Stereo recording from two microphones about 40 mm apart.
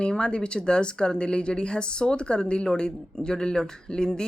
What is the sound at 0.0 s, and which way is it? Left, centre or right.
A woman's voice, left.